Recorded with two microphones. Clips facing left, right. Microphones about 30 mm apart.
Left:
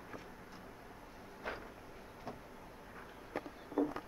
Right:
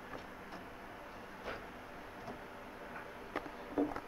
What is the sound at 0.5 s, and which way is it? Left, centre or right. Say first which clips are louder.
Vehicle: right 4 dB; right.